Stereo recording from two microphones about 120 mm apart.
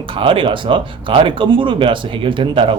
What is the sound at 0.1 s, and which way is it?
Speech, 45° right (ahead or behind).